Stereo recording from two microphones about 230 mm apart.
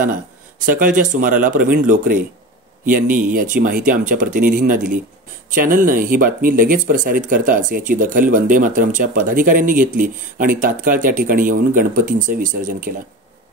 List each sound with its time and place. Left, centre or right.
0.7 s speech: right